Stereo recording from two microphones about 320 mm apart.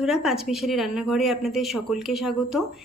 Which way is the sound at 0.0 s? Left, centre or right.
Centre.